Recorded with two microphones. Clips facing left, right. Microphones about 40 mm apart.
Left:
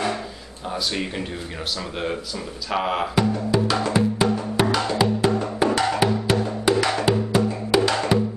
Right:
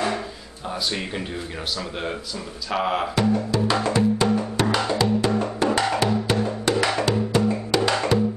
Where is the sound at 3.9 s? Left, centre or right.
Centre.